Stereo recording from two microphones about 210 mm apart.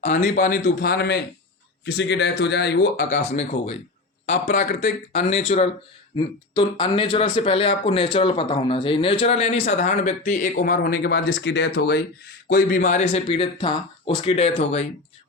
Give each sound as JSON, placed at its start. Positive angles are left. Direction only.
{"t": 0.0, "sound": "speech", "side_deg": 35}
{"t": 3.1, "sound": "speech", "side_deg": 35}